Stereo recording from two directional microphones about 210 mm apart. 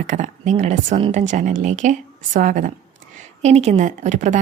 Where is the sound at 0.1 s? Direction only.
35° right (ahead or behind).